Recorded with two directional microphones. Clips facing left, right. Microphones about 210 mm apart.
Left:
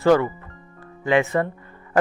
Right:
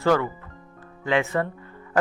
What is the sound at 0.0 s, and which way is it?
Speech, 15° left (ahead or behind).